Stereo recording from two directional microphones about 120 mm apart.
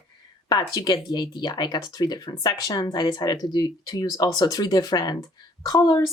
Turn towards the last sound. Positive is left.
turn(degrees=30)  # may be behind; listen again after turning